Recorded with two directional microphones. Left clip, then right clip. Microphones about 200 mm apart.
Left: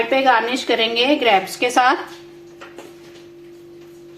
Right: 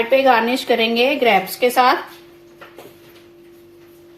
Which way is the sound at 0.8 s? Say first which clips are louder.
Left 1 dB; 20° left (ahead or behind).